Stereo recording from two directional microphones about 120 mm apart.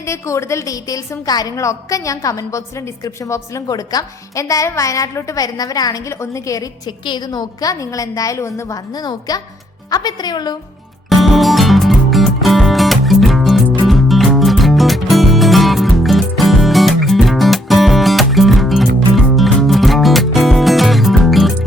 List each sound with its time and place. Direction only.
0.0 s a woman's voice: 25° left (ahead or behind)
11.2 s music: centre (ahead or behind)